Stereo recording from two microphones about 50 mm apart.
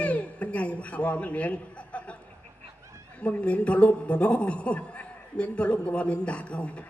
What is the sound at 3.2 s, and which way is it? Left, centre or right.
A man's voice, left.